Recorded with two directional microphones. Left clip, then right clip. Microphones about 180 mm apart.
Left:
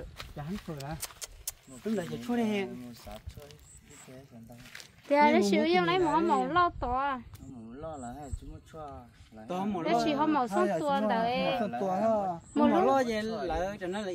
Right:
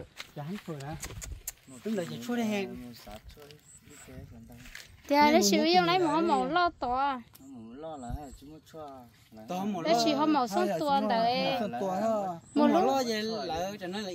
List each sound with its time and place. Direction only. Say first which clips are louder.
0.5 s speech: even; 10° right (ahead or behind)
1.0 s speech: left 1 dB; 45° left (ahead or behind)
2.0 s speech: left 1 dB; 40° right (ahead or behind)
2.8 s speech: even; 20° left (ahead or behind)
5.0 s a woman's voice: right 1 dB; 70° right (ahead or behind)
7.7 s speech: even; 5° left (ahead or behind)
9.5 s a woman's voice: right 1 dB; 45° right (ahead or behind); by 11.6 s 65° right (ahead or behind)
11.8 s speech: left 3 dB; 15° right (ahead or behind)
12.5 s speech: even; 65° right (ahead or behind)